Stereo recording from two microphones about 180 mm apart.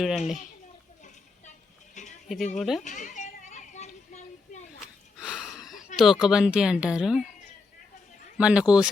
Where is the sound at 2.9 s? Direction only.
45° left (ahead or behind).